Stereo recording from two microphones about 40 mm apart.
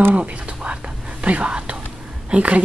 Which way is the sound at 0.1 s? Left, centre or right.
Right.